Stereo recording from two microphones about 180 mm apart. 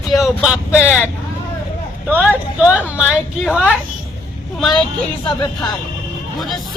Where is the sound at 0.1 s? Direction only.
Centre (ahead or behind).